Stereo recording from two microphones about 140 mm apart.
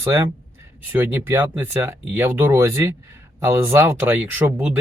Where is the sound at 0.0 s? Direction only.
20° right (ahead or behind).